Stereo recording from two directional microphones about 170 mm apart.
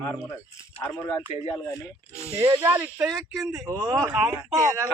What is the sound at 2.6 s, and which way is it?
Speech, 15° right (ahead or behind).